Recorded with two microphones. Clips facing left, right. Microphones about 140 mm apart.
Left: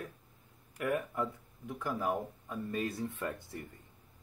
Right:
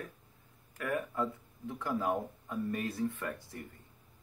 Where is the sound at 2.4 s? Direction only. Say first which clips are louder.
Right 1 dB; 20° left (ahead or behind).